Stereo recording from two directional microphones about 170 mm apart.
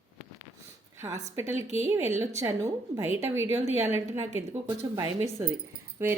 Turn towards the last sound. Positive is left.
turn(degrees=-15)  # may be behind; listen again after turning